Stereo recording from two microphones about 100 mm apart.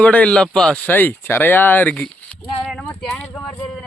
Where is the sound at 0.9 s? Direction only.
20° left (ahead or behind).